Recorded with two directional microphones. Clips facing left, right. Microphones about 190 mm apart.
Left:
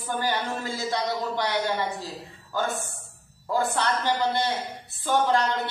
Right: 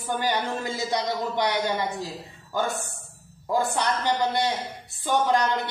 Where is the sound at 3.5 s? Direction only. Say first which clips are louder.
Right 1 dB; 15° right (ahead or behind).